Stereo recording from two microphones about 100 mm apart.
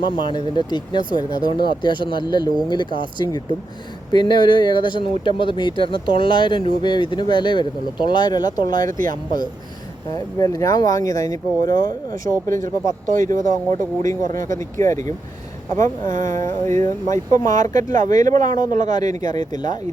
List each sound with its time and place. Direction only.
0.0 s speech: 50° left (ahead or behind)